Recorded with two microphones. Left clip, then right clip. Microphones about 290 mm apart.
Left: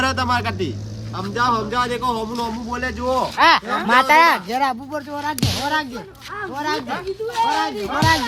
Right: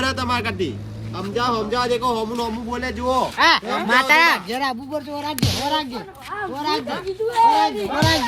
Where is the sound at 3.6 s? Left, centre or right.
Centre.